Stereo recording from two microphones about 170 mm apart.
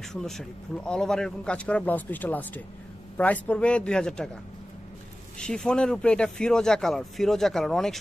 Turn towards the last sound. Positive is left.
turn(degrees=0)  # may be behind; listen again after turning